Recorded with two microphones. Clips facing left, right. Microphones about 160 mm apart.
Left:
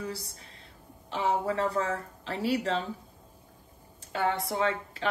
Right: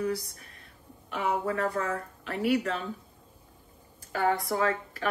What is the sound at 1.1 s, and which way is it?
Speech, 30° left (ahead or behind).